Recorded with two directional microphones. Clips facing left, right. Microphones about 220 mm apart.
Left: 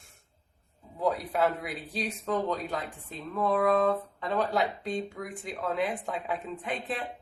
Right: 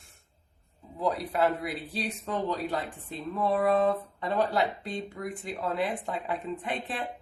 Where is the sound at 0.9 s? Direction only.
Centre (ahead or behind).